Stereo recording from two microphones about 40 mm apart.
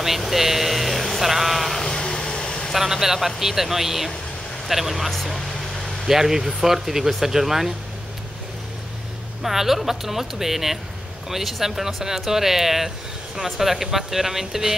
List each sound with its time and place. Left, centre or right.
0.0 s speech: centre
1.9 s vehicle: centre
2.7 s speech: centre
5.1 s vehicle: centre
6.0 s speech: centre
9.4 s speech: centre